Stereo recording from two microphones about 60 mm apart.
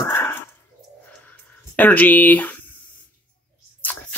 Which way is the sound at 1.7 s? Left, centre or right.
Left.